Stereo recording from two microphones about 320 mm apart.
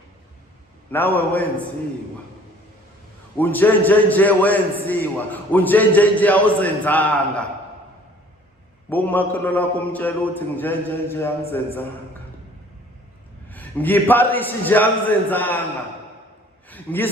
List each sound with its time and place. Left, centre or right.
0.9 s a man's voice: centre
3.3 s a man's voice: centre
8.9 s a man's voice: centre
13.5 s a man's voice: centre
16.6 s a sound: centre